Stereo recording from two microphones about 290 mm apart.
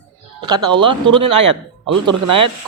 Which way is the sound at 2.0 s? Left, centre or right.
Right.